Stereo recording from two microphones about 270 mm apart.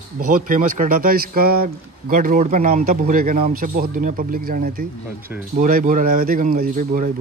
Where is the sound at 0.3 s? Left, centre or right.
Right.